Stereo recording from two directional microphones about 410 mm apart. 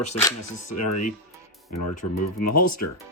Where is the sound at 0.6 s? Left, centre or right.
Left.